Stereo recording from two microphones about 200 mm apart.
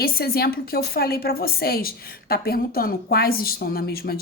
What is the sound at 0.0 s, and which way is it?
A woman's voice, 50° left (ahead or behind).